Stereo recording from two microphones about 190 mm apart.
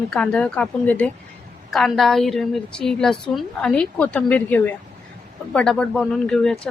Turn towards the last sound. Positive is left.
turn(degrees=5)  # may be behind; listen again after turning